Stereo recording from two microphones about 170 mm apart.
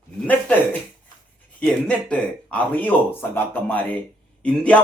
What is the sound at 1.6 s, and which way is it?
Speech, 5° left (ahead or behind).